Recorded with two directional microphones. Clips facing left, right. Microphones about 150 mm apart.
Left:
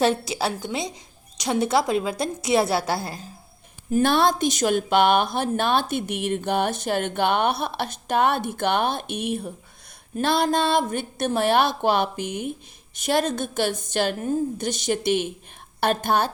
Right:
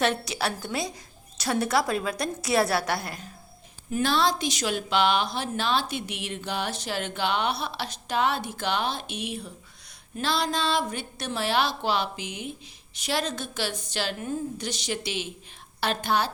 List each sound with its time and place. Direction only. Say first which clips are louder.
0.0 s a woman's voice: left 4 dB; 30° left (ahead or behind)
4.0 s a woman's voice: left 4 dB; 55° left (ahead or behind)